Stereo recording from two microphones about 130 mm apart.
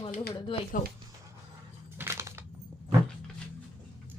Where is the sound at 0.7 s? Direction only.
90° left.